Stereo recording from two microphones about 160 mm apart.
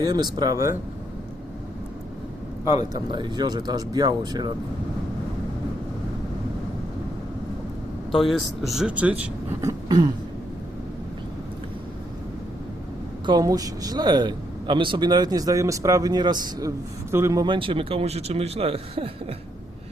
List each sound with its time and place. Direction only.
0.0 s a man's voice: 25° right (ahead or behind)
2.7 s a man's voice: 30° right (ahead or behind)
8.3 s speech: centre (ahead or behind); by 10.1 s 20° right (ahead or behind)
13.2 s a man's voice: 25° right (ahead or behind)
17.4 s speech: 30° right (ahead or behind)